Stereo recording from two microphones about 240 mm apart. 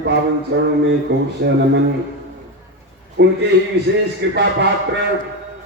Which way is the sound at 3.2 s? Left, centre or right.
Right.